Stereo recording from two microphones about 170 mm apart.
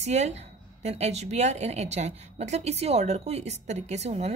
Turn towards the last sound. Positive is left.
turn(degrees=-40)  # may be behind; listen again after turning